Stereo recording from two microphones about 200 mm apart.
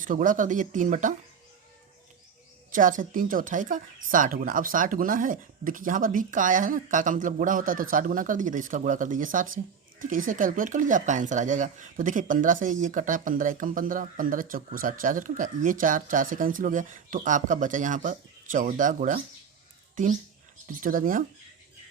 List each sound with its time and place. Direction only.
0.0 s speech: 40° right (ahead or behind)
2.7 s speech: 40° right (ahead or behind)
20.8 s speech: 40° right (ahead or behind)